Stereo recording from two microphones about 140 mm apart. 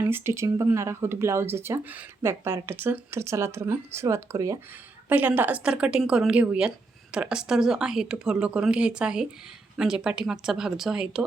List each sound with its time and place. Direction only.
0.0 s speech: 20° right (ahead or behind)
5.0 s speech: 10° right (ahead or behind)